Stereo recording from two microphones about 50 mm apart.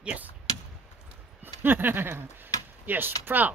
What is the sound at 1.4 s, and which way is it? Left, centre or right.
Speech, right.